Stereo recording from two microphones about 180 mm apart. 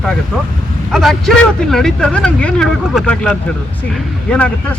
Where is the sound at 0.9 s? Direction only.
Centre (ahead or behind).